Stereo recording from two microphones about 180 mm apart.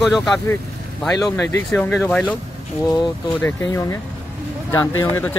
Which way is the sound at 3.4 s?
15° left (ahead or behind).